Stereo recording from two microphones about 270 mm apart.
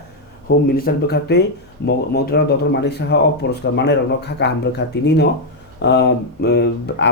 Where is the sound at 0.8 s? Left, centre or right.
Left.